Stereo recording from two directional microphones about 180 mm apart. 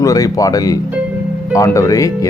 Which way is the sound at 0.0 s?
20° left (ahead or behind).